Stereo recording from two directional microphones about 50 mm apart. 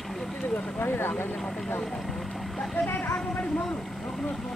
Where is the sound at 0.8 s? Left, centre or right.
Left.